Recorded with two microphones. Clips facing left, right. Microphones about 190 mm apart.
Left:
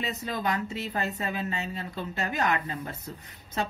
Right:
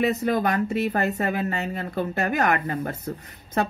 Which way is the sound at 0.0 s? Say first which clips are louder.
Right 9 dB; 60° right (ahead or behind).